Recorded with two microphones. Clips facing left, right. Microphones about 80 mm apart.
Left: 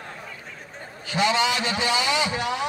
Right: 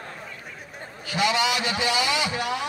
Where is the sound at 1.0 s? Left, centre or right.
Left.